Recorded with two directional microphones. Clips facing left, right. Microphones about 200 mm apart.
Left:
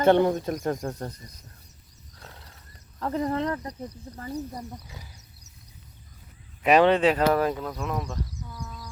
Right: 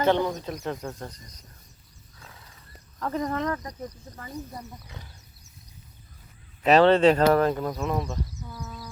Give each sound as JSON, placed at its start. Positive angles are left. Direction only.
{"t": 0.0, "sound": "speech", "side_deg": 50}
{"t": 3.0, "sound": "speech", "side_deg": 30}
{"t": 6.6, "sound": "speech", "side_deg": 10}
{"t": 7.5, "sound": "speech", "side_deg": -5}